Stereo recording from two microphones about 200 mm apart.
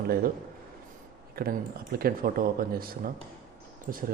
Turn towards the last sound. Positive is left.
turn(degrees=-45)  # may be behind; listen again after turning